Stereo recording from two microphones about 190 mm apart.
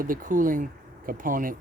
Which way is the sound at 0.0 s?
45° right (ahead or behind).